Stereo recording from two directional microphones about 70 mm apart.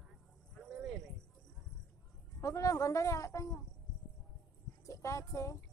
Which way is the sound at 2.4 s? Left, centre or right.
Left.